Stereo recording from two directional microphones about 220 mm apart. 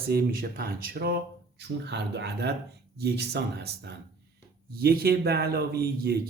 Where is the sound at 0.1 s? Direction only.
45° right (ahead or behind).